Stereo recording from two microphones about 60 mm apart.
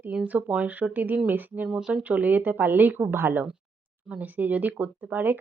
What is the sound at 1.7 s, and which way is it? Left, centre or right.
Speech, centre.